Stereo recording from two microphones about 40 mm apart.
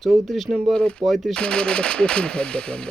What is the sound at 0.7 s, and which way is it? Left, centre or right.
Speech, left.